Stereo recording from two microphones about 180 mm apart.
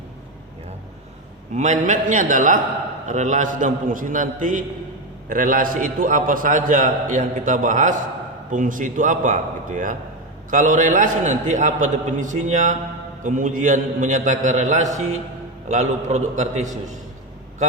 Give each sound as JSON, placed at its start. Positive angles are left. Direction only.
{"t": 1.5, "sound": "a man's voice", "side_deg": -40}